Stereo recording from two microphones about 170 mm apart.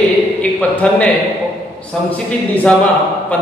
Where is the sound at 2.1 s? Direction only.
5° left (ahead or behind).